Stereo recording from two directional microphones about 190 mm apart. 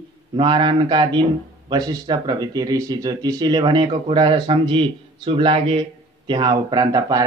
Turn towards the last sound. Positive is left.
turn(degrees=-20)  # may be behind; listen again after turning